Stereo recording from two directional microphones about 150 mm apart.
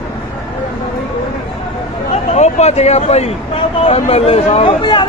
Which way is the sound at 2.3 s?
50° left (ahead or behind).